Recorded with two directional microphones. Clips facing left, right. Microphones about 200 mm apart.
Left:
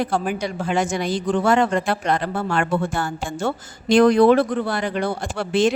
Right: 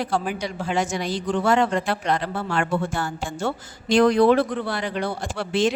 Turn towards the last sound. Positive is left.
turn(degrees=50)  # may be behind; listen again after turning